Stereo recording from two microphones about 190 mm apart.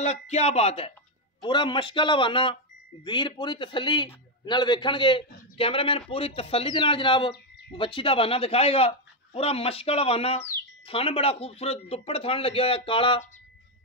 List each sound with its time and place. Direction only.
0.0 s a man's voice: 35° left (ahead or behind)